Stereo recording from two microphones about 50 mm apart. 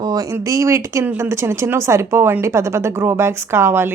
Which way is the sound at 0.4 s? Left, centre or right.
Right.